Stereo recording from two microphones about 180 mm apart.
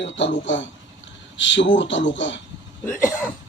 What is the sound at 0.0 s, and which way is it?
Speech, 90° left.